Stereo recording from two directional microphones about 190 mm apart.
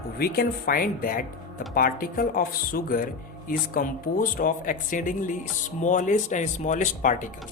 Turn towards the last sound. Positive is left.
turn(degrees=45)  # may be behind; listen again after turning